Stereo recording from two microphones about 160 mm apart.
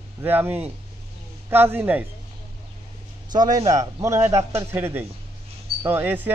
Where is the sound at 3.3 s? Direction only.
25° right (ahead or behind).